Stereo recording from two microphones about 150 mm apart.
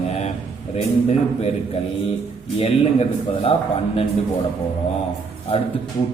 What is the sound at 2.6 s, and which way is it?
Speech, 40° left (ahead or behind).